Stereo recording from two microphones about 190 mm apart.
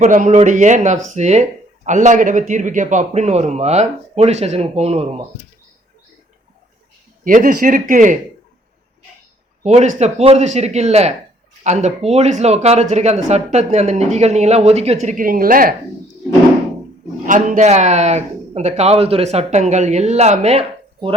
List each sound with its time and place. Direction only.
0.0 s speech: 40° right (ahead or behind)
7.3 s speech: 45° right (ahead or behind)
9.6 s speech: 40° right (ahead or behind)
17.2 s speech: 45° right (ahead or behind)